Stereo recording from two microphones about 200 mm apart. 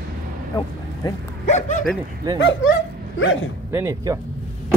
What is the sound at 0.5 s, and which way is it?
Speech, 20° left (ahead or behind).